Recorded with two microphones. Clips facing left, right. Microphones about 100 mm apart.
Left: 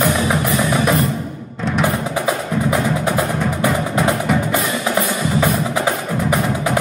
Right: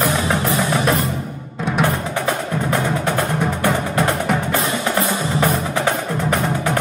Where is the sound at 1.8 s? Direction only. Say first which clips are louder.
Left 2 dB; 10° left (ahead or behind).